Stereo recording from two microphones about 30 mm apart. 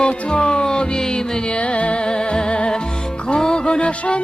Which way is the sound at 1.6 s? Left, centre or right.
Left.